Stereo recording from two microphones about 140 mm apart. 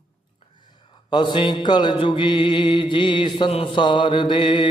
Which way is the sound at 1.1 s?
35° left (ahead or behind).